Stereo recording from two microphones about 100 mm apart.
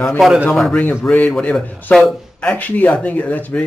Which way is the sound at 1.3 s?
5° left (ahead or behind).